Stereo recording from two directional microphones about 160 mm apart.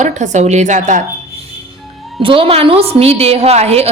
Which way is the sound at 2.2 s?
35° right (ahead or behind).